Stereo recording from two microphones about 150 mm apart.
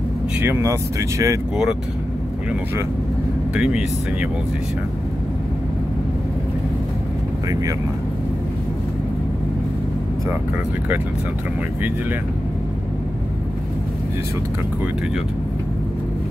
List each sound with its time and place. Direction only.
0.4 s speech: 15° right (ahead or behind)
3.5 s speech: 5° right (ahead or behind)